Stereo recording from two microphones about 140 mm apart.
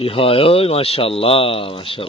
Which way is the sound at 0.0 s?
40° left (ahead or behind).